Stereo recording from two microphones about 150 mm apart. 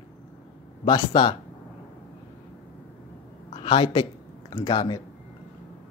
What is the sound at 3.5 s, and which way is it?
Speech, 35° left (ahead or behind).